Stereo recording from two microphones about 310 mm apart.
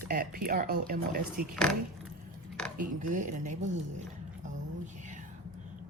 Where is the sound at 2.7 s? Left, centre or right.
Right.